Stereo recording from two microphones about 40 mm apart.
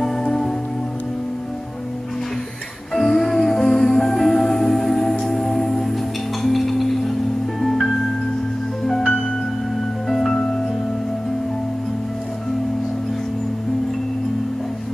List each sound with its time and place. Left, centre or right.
2.9 s music: centre
10.3 s music: left